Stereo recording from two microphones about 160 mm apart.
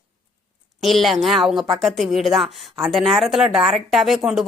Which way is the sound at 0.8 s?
Centre (ahead or behind).